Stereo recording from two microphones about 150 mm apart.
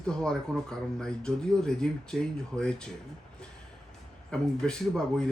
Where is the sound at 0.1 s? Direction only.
5° left (ahead or behind).